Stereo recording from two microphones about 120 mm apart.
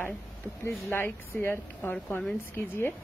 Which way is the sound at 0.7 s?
20° left (ahead or behind).